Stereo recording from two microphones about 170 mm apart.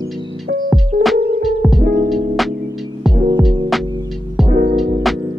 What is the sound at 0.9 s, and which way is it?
Music, 55° right (ahead or behind).